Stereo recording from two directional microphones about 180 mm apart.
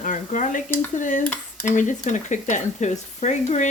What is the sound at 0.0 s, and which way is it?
Stir, 45° left (ahead or behind).